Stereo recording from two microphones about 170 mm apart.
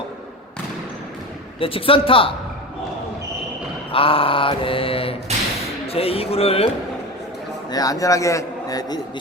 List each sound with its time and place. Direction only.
1.5 s mantra: 30° left (ahead or behind)
3.9 s mantra: 30° left (ahead or behind)
7.7 s a man's voice: 20° left (ahead or behind)